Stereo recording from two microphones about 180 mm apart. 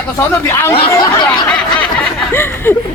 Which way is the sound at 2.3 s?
10° left (ahead or behind).